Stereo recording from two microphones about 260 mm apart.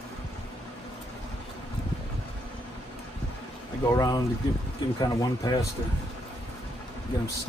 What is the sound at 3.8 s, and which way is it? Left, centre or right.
Speech, centre.